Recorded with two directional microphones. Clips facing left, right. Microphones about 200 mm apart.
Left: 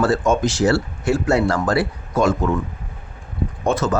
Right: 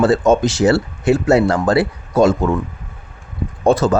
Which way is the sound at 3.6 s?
30° right (ahead or behind).